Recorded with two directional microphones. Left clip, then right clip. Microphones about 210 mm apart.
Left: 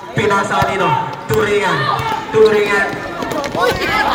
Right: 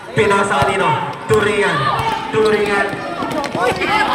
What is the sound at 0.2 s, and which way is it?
Speech, 25° right (ahead or behind).